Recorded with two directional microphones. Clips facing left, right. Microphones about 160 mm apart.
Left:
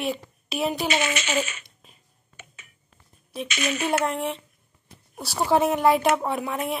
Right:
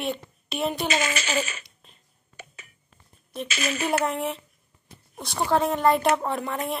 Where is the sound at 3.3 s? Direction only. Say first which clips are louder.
Left 1 dB; centre (ahead or behind).